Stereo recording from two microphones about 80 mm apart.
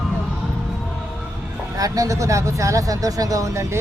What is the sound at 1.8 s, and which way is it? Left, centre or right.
Speech, right.